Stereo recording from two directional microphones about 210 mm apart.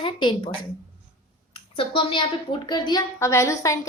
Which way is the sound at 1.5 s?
25° left (ahead or behind).